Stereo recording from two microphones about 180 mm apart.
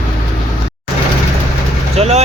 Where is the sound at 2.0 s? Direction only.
35° right (ahead or behind).